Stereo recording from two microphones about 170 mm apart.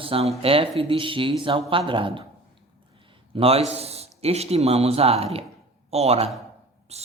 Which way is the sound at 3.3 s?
35° right (ahead or behind).